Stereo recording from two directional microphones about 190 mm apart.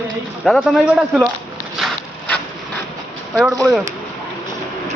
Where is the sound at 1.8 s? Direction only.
Centre (ahead or behind).